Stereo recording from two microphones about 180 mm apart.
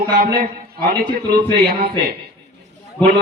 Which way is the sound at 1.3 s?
60° right (ahead or behind).